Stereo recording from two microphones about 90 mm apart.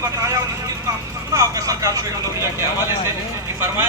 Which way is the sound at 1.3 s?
35° right (ahead or behind).